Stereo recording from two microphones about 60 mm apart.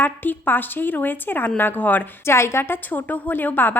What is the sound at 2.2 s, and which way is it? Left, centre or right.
A woman's voice, left.